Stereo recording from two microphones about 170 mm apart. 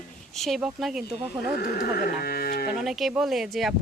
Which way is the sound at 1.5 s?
60° left (ahead or behind).